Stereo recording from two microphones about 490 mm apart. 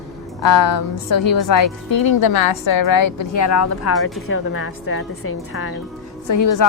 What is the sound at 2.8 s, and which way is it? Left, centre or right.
Speech, left.